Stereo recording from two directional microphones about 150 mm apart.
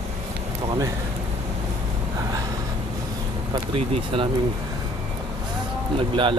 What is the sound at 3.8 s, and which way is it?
Speech, 40° right (ahead or behind).